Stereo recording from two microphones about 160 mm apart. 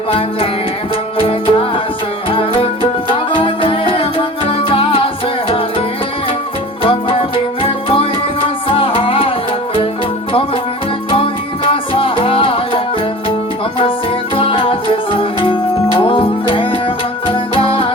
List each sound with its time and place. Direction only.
1.2 s music: 35° left (ahead or behind)
6.8 s music: 35° left (ahead or behind)
11.1 s music: 35° left (ahead or behind)
14.3 s music: 35° left (ahead or behind)